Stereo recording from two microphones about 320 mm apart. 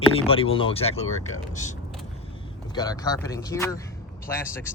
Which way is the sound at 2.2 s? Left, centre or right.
Centre.